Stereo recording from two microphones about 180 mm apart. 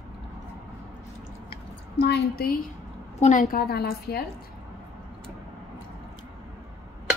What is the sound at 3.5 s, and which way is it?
Speech, 60° left (ahead or behind).